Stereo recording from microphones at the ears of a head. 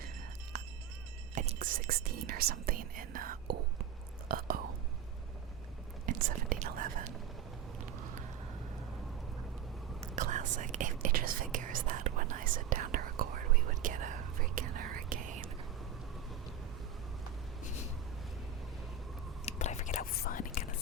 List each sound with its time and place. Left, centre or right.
1.4 s whispering: right
6.1 s whispering: right
10.2 s whispering: right
19.5 s whispering: left